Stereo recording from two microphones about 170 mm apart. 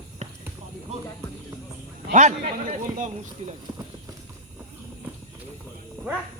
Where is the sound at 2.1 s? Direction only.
45° right (ahead or behind).